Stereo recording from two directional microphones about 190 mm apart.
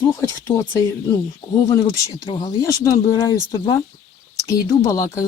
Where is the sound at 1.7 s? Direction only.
20° left (ahead or behind).